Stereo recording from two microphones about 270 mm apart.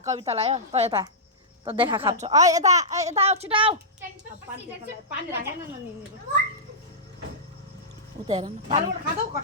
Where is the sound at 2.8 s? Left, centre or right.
Right.